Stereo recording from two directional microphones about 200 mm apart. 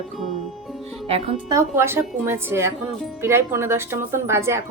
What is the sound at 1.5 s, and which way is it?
A woman's voice, 15° right (ahead or behind).